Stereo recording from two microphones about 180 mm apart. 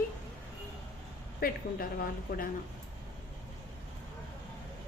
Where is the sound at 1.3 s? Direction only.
55° left (ahead or behind).